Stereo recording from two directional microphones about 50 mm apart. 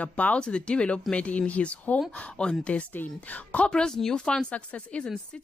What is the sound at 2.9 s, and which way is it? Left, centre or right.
Speech, left.